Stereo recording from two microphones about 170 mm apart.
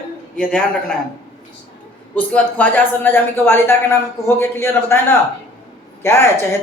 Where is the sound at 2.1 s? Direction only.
10° left (ahead or behind).